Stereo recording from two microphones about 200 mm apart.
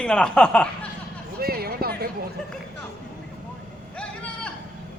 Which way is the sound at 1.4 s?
50° right (ahead or behind).